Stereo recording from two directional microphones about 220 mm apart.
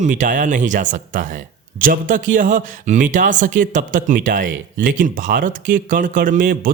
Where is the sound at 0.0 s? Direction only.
35° right (ahead or behind).